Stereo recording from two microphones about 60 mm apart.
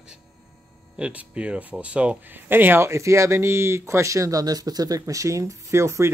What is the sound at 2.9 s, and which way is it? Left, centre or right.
Speech, right.